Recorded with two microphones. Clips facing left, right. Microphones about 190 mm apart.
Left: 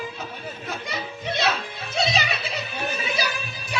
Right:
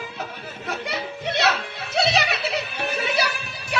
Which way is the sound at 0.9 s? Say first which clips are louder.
Right 1 dB; 65° right (ahead or behind).